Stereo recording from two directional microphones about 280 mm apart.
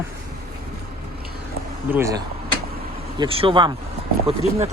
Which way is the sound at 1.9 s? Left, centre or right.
Centre.